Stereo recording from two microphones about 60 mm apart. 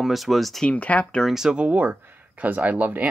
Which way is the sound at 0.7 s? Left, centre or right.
Left.